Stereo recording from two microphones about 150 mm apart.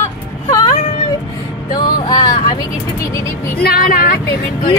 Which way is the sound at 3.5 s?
85° left.